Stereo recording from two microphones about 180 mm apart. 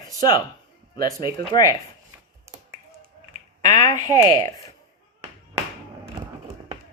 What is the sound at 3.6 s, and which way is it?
Speech, 25° left (ahead or behind).